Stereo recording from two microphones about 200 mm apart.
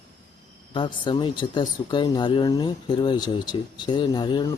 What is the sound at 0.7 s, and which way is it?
Speech, 25° left (ahead or behind).